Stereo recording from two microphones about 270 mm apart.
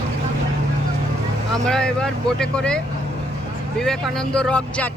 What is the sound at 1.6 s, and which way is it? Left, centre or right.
Speech, centre.